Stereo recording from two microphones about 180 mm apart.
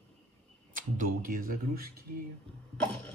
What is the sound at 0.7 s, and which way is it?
Speech, 50° right (ahead or behind).